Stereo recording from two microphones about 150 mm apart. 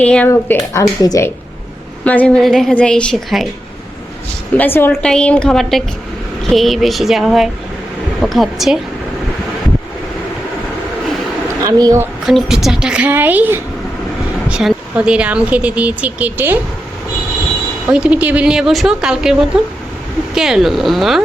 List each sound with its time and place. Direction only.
0.0 s a woman's voice: 10° left (ahead or behind)
0.3 s speech: 20° left (ahead or behind)
2.0 s speech: 10° left (ahead or behind)
4.5 s a woman's voice: 15° left (ahead or behind)
11.6 s speech: 20° right (ahead or behind)
12.2 s speech: centre (ahead or behind)
17.8 s speech: 5° right (ahead or behind)